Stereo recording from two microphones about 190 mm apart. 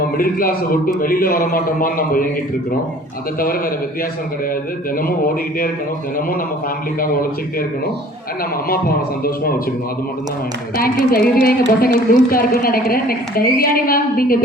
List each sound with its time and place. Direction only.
0.2 s a woman's voice: 50° left (ahead or behind)
7.0 s a woman's voice: 50° left (ahead or behind)
9.2 s a woman's voice: 50° left (ahead or behind)
10.8 s a woman's voice: 50° left (ahead or behind)